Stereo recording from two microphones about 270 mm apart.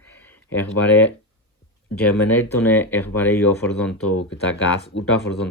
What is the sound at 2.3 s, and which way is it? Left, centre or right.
Speech, centre.